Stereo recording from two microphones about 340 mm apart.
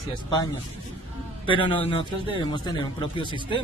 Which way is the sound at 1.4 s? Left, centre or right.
Centre.